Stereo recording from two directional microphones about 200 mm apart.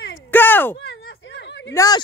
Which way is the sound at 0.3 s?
10° left (ahead or behind).